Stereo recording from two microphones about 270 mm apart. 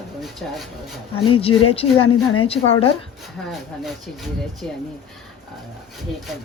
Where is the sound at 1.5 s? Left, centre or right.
Left.